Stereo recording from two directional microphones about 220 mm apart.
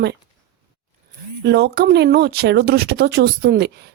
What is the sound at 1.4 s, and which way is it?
A woman's voice, 50° right (ahead or behind).